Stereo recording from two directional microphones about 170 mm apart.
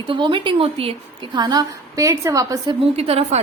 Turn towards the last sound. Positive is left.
turn(degrees=-35)  # may be behind; listen again after turning